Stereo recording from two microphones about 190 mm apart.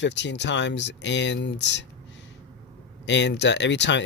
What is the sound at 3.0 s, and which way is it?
Speech, 65° left (ahead or behind).